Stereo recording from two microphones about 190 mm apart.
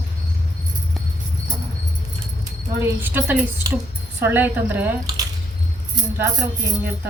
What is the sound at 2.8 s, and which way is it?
A woman's voice, 10° right (ahead or behind).